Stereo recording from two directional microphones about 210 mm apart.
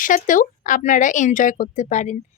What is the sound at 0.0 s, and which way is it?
Speech, 40° left (ahead or behind).